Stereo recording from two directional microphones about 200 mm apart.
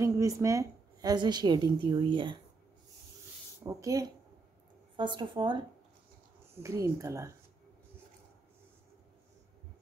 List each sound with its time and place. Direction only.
0.0 s a woman's voice: 15° right (ahead or behind)
3.6 s a woman's voice: 15° right (ahead or behind)